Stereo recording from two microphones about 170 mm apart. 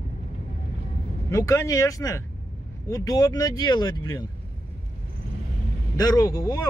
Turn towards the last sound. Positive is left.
turn(degrees=20)  # may be behind; listen again after turning